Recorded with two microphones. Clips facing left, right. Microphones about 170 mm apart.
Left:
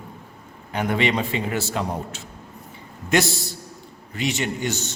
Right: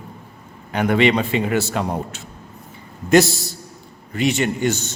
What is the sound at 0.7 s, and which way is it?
A man's voice, 70° right (ahead or behind).